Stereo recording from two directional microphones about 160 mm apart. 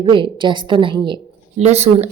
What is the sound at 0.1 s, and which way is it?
A woman's voice, 30° right (ahead or behind).